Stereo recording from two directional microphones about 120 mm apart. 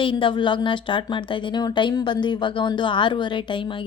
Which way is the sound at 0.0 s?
45° left (ahead or behind).